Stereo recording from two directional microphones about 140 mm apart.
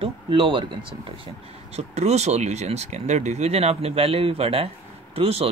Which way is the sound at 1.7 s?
50° right (ahead or behind).